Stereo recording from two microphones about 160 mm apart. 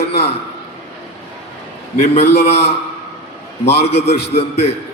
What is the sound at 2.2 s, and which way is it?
Speech, 90° left.